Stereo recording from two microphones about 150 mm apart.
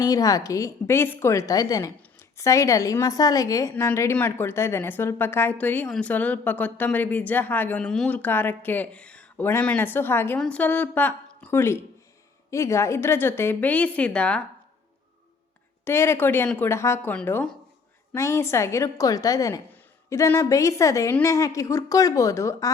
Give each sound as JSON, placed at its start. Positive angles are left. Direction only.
{"t": 0.0, "sound": "a woman's voice", "side_deg": 25}
{"t": 15.8, "sound": "a woman's voice", "side_deg": 15}